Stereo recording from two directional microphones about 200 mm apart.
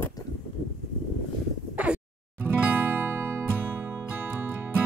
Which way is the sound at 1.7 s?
5° right (ahead or behind).